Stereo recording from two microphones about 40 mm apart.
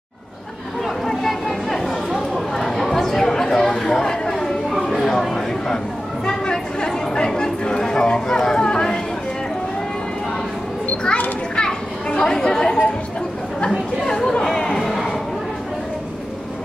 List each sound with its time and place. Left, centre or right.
1.0 s chatter: centre
6.2 s chatter: centre
11.1 s children playing: left
14.0 s chatter: centre